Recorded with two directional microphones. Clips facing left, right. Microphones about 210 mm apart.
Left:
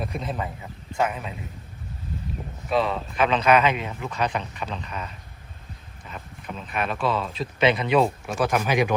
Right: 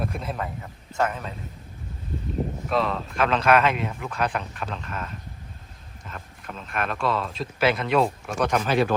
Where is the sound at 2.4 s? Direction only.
30° right (ahead or behind).